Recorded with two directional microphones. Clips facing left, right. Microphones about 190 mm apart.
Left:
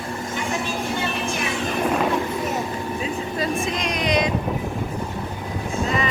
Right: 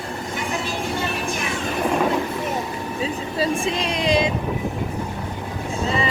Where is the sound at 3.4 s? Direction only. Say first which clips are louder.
Right 4 dB; 30° right (ahead or behind).